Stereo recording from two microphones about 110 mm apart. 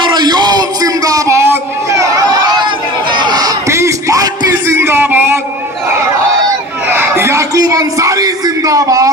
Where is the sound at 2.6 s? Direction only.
45° right (ahead or behind); by 5.4 s 20° right (ahead or behind).